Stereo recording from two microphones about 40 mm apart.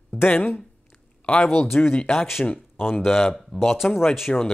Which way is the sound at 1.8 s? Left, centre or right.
Left.